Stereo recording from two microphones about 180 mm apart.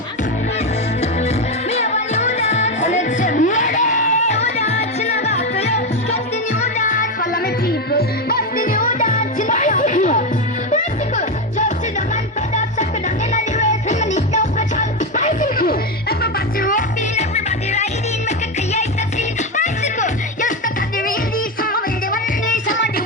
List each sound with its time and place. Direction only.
1.7 s music: 40° left (ahead or behind)
7.7 s music: 60° left (ahead or behind); by 11.6 s 45° left (ahead or behind)
13.3 s music: 40° left (ahead or behind)
21.6 s music: 50° left (ahead or behind)